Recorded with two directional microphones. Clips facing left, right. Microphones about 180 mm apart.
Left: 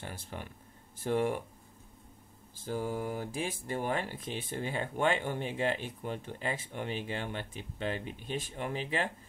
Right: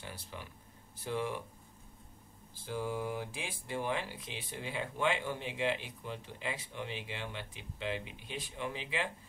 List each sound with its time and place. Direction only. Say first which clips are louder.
0.0 s speech: left 4 dB; 50° left (ahead or behind)
2.5 s speech: left 3 dB; 45° left (ahead or behind)